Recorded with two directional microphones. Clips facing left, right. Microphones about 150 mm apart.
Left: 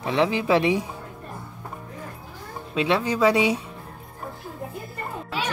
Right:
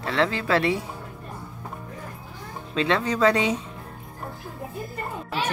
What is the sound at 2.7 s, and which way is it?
Speech, 10° left (ahead or behind).